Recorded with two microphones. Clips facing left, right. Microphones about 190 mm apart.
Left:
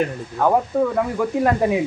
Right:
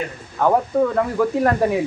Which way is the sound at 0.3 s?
5° left (ahead or behind).